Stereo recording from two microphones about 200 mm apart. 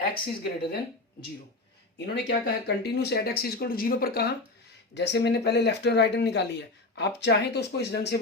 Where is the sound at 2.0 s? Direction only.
60° left (ahead or behind).